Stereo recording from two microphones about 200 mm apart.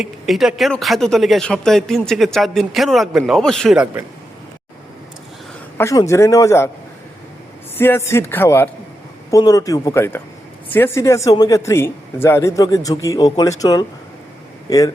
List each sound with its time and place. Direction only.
0.0 s speech: centre (ahead or behind)
5.7 s speech: 15° left (ahead or behind)
7.8 s speech: 10° left (ahead or behind)